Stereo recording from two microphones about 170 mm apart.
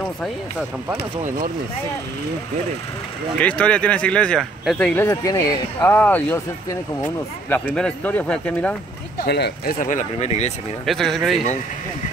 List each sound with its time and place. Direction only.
3.3 s speech: 5° left (ahead or behind)
7.4 s speech: 10° left (ahead or behind)
9.2 s speech: 70° left (ahead or behind)
9.8 s speech: 50° left (ahead or behind)
10.9 s speech: centre (ahead or behind)